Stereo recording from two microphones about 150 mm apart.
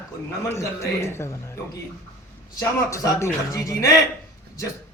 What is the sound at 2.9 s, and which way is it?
Speech, 20° left (ahead or behind).